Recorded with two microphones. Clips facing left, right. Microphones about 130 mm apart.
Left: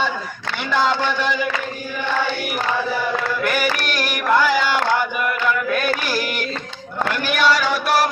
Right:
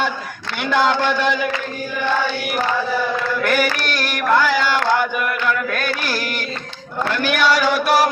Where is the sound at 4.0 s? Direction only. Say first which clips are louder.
Right 1 dB; 5° left (ahead or behind).